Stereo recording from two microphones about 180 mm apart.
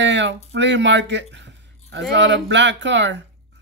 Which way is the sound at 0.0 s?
80° right.